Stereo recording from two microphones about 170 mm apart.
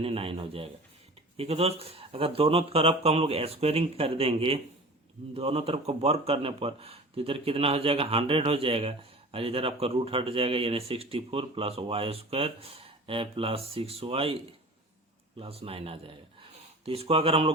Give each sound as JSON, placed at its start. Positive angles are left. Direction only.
{"t": 0.0, "sound": "speech", "side_deg": -35}
{"t": 15.4, "sound": "speech", "side_deg": -35}